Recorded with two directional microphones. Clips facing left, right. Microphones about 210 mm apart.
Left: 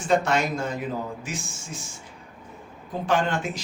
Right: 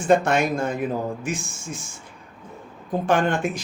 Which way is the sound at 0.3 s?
55° right (ahead or behind).